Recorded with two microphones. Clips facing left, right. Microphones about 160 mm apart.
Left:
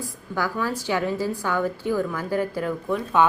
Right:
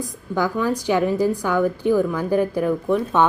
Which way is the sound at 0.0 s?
15° right (ahead or behind).